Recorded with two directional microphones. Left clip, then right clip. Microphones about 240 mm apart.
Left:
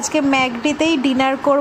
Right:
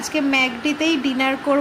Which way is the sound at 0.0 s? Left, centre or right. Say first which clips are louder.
Left 2 dB; centre.